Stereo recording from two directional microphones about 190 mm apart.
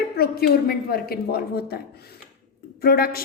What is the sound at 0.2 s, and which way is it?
A woman's voice, 55° left (ahead or behind).